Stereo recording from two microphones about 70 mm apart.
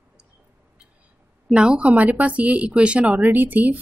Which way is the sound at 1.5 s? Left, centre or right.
Centre.